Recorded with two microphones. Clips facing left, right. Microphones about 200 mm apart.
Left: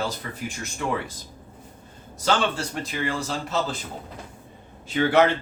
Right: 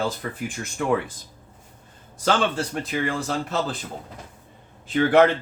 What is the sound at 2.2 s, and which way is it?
A man's voice, 55° right (ahead or behind).